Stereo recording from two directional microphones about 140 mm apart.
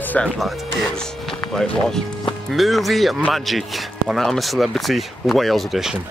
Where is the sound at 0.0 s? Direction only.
10° left (ahead or behind).